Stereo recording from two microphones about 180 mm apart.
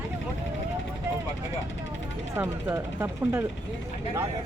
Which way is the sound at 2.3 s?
10° right (ahead or behind).